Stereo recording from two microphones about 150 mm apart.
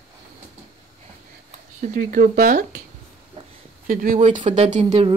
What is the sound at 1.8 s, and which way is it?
Speech, 65° right (ahead or behind).